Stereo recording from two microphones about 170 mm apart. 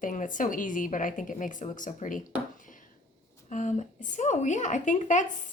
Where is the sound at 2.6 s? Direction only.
50° left (ahead or behind).